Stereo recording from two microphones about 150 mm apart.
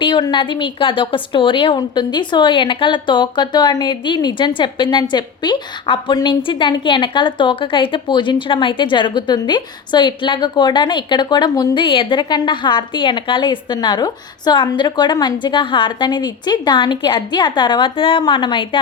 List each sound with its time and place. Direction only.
0.0 s a woman's voice: 35° left (ahead or behind)